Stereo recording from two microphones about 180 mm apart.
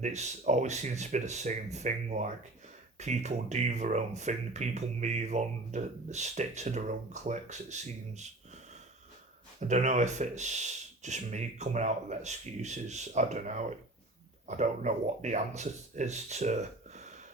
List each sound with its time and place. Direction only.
0.0 s speech: 40° right (ahead or behind)
9.6 s speech: 40° right (ahead or behind)